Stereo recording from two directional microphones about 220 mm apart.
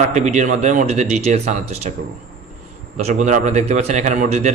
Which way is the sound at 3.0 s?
30° right (ahead or behind).